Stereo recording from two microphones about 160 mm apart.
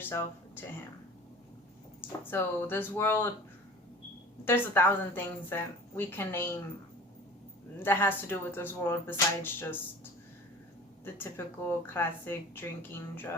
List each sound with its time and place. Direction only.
0.0 s a sound: 15° left (ahead or behind)
2.3 s speech: 15° left (ahead or behind)
4.4 s speech: 15° left (ahead or behind)
7.8 s speech: 15° left (ahead or behind)
11.0 s speech: 15° left (ahead or behind)